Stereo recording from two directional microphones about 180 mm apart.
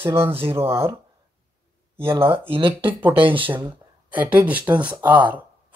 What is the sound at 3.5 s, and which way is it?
Speech, 15° right (ahead or behind).